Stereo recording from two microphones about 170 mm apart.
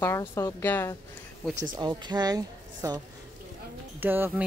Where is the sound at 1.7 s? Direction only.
25° right (ahead or behind).